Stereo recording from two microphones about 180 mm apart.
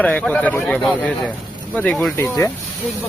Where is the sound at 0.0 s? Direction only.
10° left (ahead or behind).